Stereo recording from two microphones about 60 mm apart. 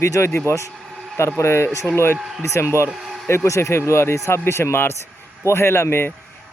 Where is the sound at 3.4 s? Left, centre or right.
Left.